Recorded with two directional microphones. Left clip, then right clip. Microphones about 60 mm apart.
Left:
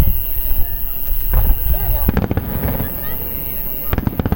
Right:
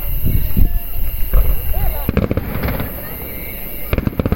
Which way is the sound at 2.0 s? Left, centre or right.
Left.